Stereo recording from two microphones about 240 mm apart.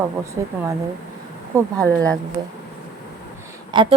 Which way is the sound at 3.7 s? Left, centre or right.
Centre.